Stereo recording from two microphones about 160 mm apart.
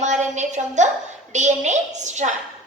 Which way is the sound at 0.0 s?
50° right (ahead or behind).